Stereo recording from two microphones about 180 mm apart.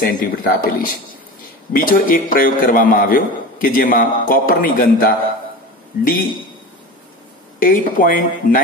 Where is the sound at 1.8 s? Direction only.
50° left (ahead or behind).